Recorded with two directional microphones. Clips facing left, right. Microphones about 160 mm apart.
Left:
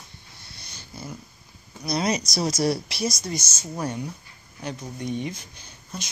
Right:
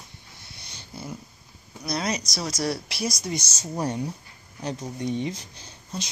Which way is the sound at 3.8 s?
35° right (ahead or behind).